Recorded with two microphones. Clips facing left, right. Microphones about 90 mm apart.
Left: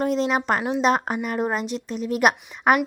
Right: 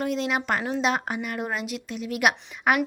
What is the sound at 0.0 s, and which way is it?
Speech, 35° left (ahead or behind).